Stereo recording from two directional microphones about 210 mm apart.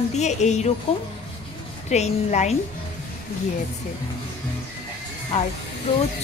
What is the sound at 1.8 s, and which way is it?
Speech, 30° left (ahead or behind).